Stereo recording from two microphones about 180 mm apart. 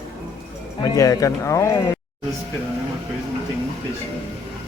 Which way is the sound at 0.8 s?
20° left (ahead or behind).